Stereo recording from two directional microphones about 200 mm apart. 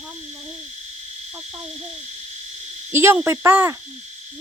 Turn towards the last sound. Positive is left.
turn(degrees=-10)  # may be behind; listen again after turning